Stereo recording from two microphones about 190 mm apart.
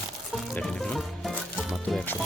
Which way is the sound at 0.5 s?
5° left (ahead or behind).